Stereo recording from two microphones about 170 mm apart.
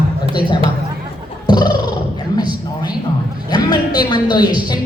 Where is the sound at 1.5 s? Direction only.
25° left (ahead or behind).